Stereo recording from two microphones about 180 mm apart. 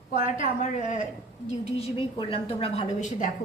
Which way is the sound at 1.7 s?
30° left (ahead or behind).